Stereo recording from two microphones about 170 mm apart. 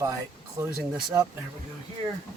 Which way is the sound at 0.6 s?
15° right (ahead or behind).